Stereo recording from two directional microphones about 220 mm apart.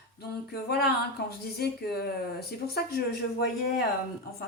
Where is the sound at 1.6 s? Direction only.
45° left (ahead or behind).